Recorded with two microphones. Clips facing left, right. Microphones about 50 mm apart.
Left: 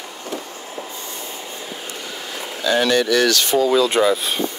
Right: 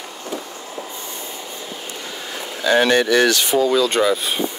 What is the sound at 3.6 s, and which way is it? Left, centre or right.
Speech, centre.